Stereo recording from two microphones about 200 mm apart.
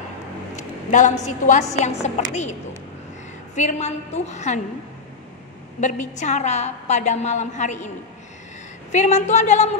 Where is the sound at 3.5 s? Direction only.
35° left (ahead or behind).